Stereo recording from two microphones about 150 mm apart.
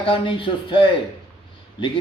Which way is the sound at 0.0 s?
35° left (ahead or behind).